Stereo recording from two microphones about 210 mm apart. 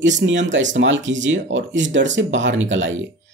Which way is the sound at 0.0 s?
60° right (ahead or behind).